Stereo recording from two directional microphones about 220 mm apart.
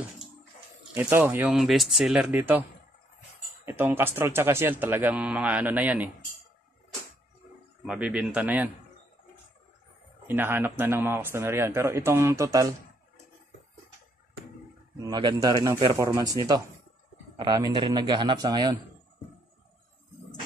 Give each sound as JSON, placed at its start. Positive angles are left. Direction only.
{"t": 0.9, "sound": "speech", "side_deg": -10}
{"t": 3.6, "sound": "speech", "side_deg": -10}
{"t": 7.8, "sound": "speech", "side_deg": -5}
{"t": 10.2, "sound": "speech", "side_deg": -10}
{"t": 15.0, "sound": "speech", "side_deg": -20}
{"t": 17.4, "sound": "a man's voice", "side_deg": -15}